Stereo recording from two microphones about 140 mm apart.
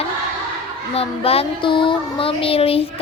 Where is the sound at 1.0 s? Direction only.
45° left (ahead or behind).